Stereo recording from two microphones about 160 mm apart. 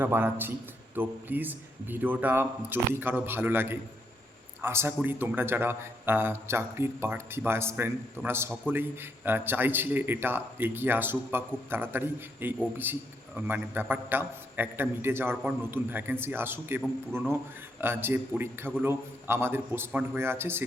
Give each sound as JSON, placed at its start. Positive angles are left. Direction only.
{"t": 0.0, "sound": "a man's voice", "side_deg": -10}